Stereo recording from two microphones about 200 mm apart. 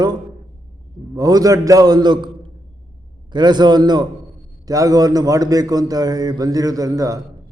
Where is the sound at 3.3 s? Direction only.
20° right (ahead or behind).